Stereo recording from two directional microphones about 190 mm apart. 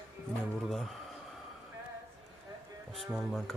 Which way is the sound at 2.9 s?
Centre (ahead or behind).